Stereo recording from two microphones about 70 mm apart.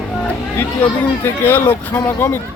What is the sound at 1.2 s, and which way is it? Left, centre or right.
Speech, left.